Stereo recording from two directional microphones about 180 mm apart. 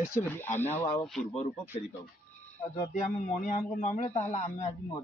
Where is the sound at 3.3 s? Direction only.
45° left (ahead or behind).